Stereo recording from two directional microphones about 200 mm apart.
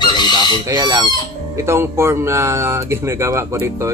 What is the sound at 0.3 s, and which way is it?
Speech, 20° right (ahead or behind).